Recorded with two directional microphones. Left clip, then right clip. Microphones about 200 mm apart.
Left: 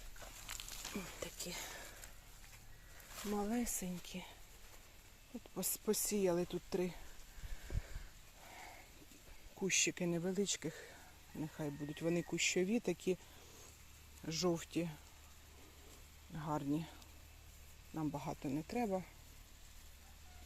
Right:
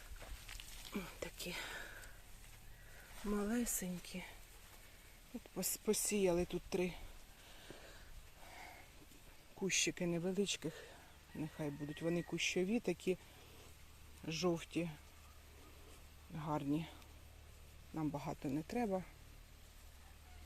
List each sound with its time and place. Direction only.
0.5 s a sound: 35° left (ahead or behind)
0.9 s a sound: 5° right (ahead or behind)
3.3 s speech: 5° right (ahead or behind)
5.5 s speech: centre (ahead or behind)
8.4 s a sound: 5° left (ahead or behind)
9.6 s speech: 10° left (ahead or behind)
14.2 s speech: 10° left (ahead or behind)
16.3 s speech: 5° left (ahead or behind)
17.9 s speech: centre (ahead or behind)